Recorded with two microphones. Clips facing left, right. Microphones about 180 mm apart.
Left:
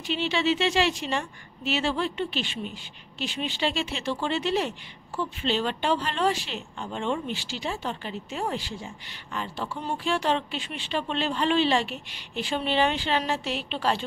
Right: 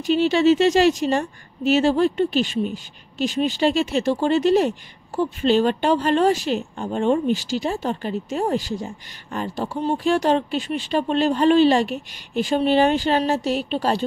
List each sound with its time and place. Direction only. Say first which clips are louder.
0.0 s speech: right 10 dB; 45° right (ahead or behind)